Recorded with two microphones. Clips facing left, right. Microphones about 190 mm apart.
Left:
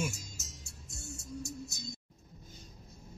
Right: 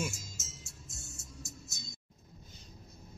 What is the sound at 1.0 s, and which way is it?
Music, 65° left (ahead or behind).